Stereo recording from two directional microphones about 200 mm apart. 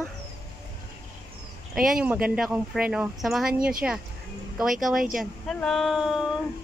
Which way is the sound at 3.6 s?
45° right (ahead or behind).